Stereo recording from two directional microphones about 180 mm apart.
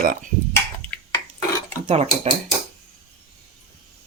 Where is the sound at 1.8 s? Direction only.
35° right (ahead or behind).